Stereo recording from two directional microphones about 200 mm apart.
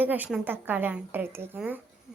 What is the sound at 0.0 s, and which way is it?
Speech, 10° right (ahead or behind).